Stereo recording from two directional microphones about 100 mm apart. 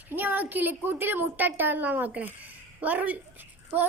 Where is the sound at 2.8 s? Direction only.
15° right (ahead or behind).